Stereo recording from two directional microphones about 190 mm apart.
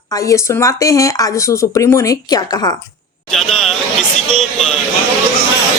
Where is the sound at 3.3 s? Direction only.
Centre (ahead or behind).